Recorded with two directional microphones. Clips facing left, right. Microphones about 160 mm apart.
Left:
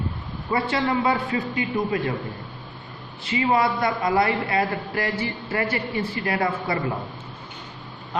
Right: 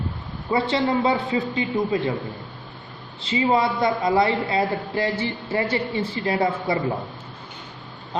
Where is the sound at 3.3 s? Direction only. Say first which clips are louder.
Right 1 dB; 25° right (ahead or behind).